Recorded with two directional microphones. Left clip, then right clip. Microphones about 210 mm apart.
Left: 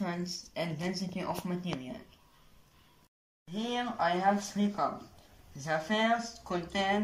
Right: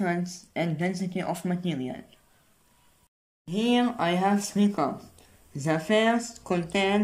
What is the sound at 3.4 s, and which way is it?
Speech, 50° right (ahead or behind).